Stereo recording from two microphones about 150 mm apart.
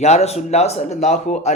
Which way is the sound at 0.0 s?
45° left (ahead or behind).